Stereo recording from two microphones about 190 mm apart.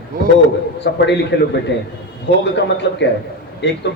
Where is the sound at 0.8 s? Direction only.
65° left (ahead or behind).